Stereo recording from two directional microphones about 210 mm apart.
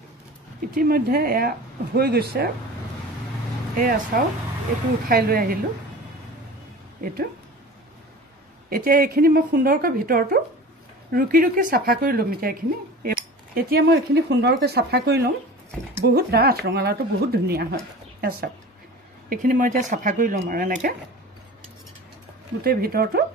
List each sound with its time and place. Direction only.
0.7 s a woman's voice: 45° right (ahead or behind)
3.7 s a woman's voice: 40° right (ahead or behind)
7.0 s speech: 40° right (ahead or behind)
8.6 s a woman's voice: 45° right (ahead or behind)
22.6 s a woman's voice: 45° right (ahead or behind)